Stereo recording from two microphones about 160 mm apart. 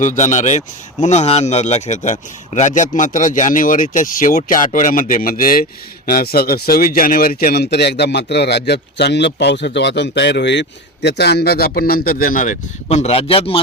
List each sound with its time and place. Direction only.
0.0 s speech: 50° left (ahead or behind)